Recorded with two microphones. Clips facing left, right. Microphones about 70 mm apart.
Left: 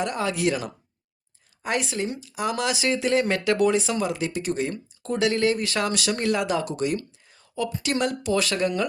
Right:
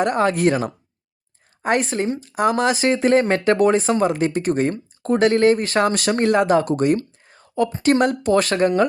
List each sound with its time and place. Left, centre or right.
0.0 s speech: right